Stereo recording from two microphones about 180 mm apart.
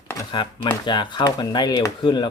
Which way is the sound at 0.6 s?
25° left (ahead or behind).